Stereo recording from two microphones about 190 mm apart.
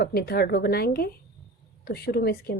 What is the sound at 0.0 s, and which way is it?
A woman's voice, 55° left (ahead or behind).